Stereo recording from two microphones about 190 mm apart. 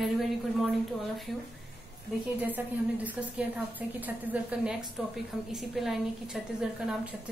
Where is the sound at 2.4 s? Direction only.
10° right (ahead or behind).